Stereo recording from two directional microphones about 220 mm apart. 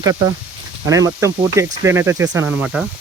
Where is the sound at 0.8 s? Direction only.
15° right (ahead or behind).